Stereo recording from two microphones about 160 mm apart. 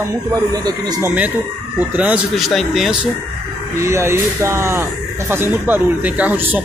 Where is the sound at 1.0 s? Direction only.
10° right (ahead or behind).